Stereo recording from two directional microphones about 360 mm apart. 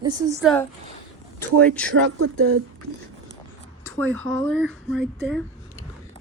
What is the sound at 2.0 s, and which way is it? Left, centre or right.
Speech, right.